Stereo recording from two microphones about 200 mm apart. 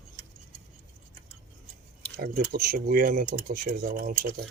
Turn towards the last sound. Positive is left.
turn(degrees=-45)  # may be behind; listen again after turning